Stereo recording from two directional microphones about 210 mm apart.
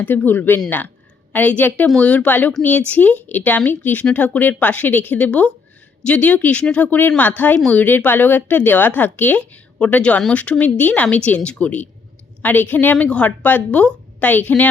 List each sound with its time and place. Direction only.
0.0 s a woman's voice: 10° left (ahead or behind)